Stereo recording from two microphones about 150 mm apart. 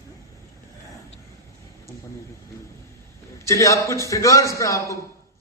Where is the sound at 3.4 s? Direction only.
20° left (ahead or behind).